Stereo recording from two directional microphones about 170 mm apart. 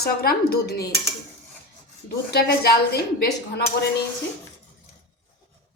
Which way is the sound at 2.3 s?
70° left (ahead or behind).